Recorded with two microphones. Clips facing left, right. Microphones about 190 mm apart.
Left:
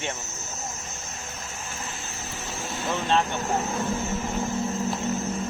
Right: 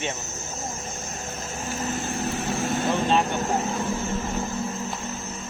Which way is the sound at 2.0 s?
65° right (ahead or behind).